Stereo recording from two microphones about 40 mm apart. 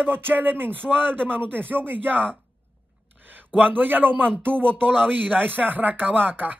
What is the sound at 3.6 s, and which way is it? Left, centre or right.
Speech, right.